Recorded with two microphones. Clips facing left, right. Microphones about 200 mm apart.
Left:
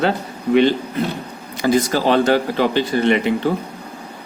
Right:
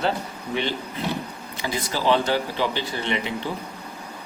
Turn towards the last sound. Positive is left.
turn(degrees=55)  # may be behind; listen again after turning